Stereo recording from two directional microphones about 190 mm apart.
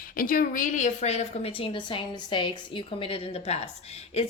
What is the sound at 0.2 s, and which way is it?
A woman's voice, 45° left (ahead or behind).